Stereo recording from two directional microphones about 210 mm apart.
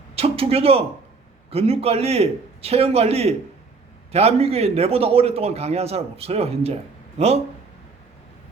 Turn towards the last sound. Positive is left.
turn(degrees=-30)  # may be behind; listen again after turning